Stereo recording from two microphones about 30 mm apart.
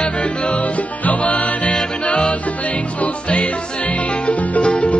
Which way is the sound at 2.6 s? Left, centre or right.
Left.